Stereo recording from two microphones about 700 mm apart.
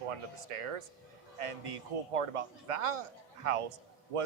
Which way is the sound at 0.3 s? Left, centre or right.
Right.